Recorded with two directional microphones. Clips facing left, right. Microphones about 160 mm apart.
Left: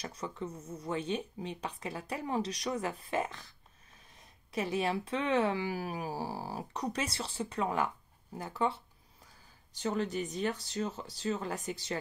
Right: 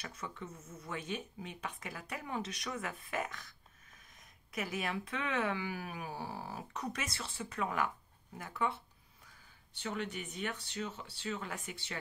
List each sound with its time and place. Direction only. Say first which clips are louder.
0.0 s speech: left 6 dB; 35° left (ahead or behind)